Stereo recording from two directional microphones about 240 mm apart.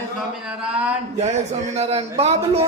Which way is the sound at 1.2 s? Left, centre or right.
Right.